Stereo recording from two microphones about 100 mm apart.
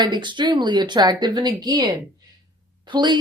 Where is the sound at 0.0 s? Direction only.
50° right (ahead or behind).